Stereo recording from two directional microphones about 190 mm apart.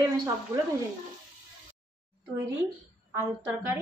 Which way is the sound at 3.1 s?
10° right (ahead or behind).